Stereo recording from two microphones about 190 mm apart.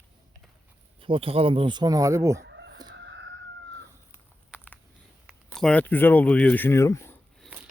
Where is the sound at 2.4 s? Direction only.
65° right (ahead or behind).